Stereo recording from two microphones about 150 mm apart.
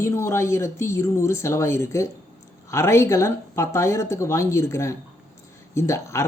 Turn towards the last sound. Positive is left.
turn(degrees=20)  # may be behind; listen again after turning